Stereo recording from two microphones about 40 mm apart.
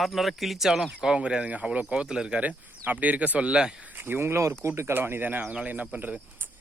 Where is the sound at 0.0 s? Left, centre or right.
Centre.